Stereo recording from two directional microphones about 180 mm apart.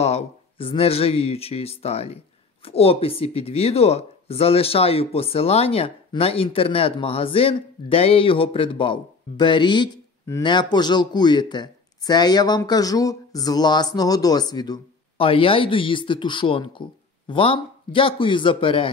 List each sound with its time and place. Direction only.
0.0 s speech: 35° left (ahead or behind)